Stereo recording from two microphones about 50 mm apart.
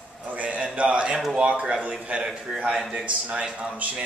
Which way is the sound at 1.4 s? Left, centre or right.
Right.